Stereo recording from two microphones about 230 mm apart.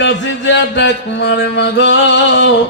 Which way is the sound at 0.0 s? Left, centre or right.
Left.